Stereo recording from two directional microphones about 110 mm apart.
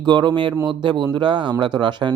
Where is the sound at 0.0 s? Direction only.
40° right (ahead or behind).